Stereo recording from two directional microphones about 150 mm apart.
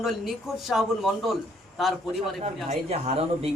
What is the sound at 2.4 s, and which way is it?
Speech, 45° right (ahead or behind).